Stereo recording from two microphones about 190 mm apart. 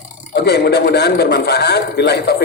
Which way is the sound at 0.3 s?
60° left (ahead or behind).